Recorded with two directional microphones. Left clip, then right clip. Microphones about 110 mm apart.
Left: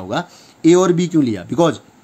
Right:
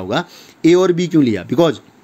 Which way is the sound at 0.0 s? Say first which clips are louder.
Right 3 dB; 30° right (ahead or behind).